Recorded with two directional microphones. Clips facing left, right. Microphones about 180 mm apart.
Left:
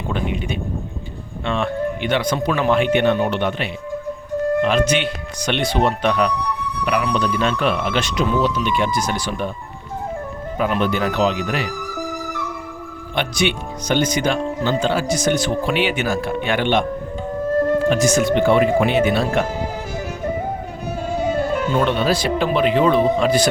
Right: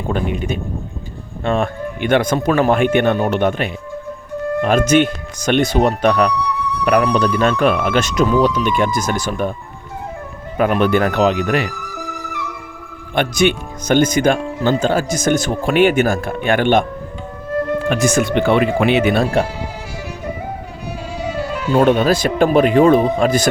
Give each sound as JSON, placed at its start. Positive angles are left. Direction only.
{"t": 0.1, "sound": "speech", "side_deg": -45}
{"t": 10.6, "sound": "speech", "side_deg": -55}
{"t": 13.1, "sound": "speech", "side_deg": -45}
{"t": 17.8, "sound": "speech", "side_deg": -55}
{"t": 19.4, "sound": "speech", "side_deg": -35}
{"t": 21.1, "sound": "music", "side_deg": 50}
{"t": 21.7, "sound": "speech", "side_deg": -45}